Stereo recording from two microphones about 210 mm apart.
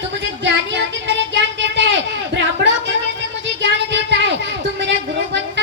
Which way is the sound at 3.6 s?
55° right (ahead or behind).